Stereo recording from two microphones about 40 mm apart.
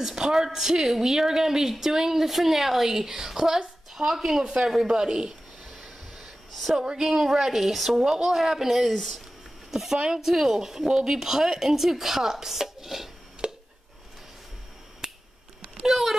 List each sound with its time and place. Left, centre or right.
0.0 s a woman's voice: centre
5.8 s a sound: centre
6.8 s a woman's voice: centre
9.7 s a woman's voice: centre
13.4 s a sound: right
15.0 s finger snapping: right
15.9 s a child's voice: centre